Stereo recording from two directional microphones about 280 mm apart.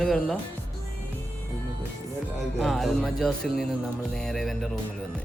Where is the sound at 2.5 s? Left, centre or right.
Centre.